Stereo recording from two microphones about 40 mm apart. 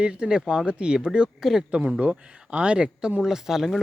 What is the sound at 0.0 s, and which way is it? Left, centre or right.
Speech, right.